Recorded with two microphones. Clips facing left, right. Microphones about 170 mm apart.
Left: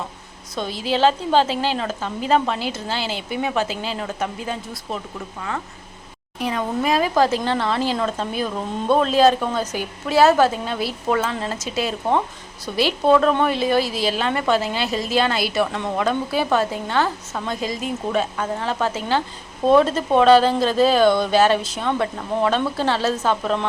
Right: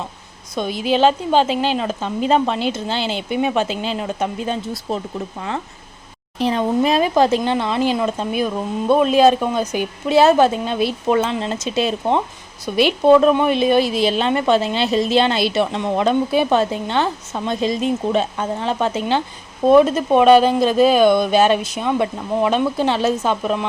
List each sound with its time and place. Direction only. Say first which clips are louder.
0.5 s a woman's voice: right 4 dB; 15° right (ahead or behind)
6.4 s a woman's voice: right 5 dB; 25° right (ahead or behind)